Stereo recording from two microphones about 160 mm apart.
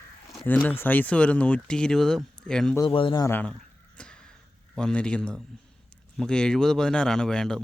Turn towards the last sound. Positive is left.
turn(degrees=5)  # may be behind; listen again after turning